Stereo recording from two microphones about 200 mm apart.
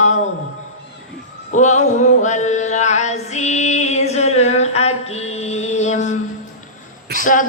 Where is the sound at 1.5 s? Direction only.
35° left (ahead or behind).